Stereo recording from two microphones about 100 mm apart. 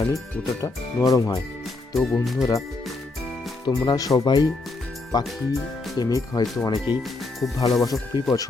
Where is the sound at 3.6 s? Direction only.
45° left (ahead or behind).